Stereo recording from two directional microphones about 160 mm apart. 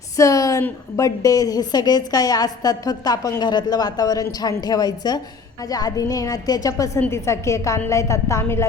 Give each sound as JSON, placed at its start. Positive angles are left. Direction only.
{"t": 0.2, "sound": "a woman's voice", "side_deg": 20}